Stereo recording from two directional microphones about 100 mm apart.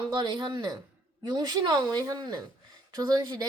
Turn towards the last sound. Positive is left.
turn(degrees=-45)  # may be behind; listen again after turning